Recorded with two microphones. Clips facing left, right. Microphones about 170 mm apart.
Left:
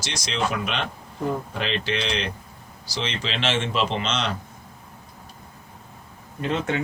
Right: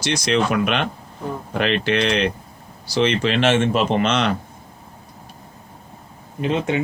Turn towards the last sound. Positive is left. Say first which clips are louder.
# right 4 dB
turn(degrees=-20)  # may be behind; listen again after turning